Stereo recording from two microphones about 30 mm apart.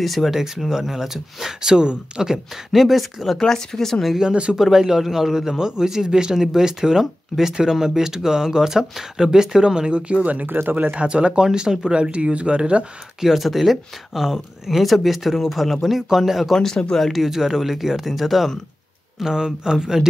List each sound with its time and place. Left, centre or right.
0.0 s speech: centre
0.7 s a man's voice: centre
2.5 s speech: centre
3.4 s speech: centre
4.2 s speech: right
4.6 s a man's voice: centre; by 10.2 s right
10.4 s speech: right
10.9 s speech: right
11.4 s a man's voice: right
13.2 s speech: centre
16.5 s speech: centre
17.1 s speech: centre
19.1 s a man's voice: centre